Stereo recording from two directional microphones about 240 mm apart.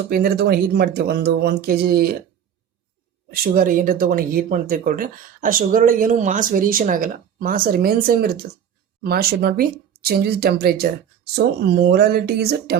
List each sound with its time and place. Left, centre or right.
0.1 s speech: right
3.3 s speech: right